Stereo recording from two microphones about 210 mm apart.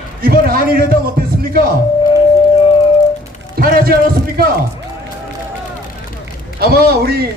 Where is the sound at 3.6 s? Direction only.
45° right (ahead or behind).